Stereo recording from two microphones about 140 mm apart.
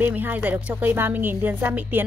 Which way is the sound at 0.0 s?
15° right (ahead or behind).